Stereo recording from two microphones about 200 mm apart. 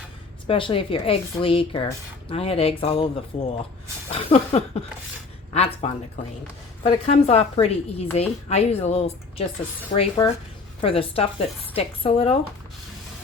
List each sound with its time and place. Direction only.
0.4 s a woman's voice: 25° left (ahead or behind)